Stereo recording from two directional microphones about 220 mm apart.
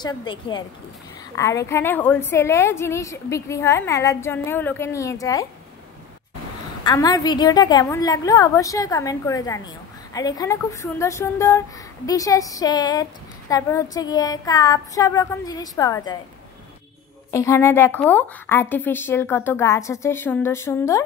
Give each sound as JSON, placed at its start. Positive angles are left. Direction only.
{"t": 0.0, "sound": "a woman's voice", "side_deg": 20}
{"t": 6.8, "sound": "a woman's voice", "side_deg": 20}
{"t": 17.3, "sound": "a woman's voice", "side_deg": 15}